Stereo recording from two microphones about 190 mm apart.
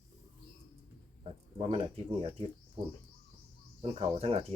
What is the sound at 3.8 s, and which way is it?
Speech, 30° right (ahead or behind).